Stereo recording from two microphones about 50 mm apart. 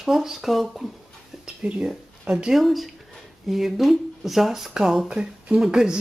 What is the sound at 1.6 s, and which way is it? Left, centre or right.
Speech, centre.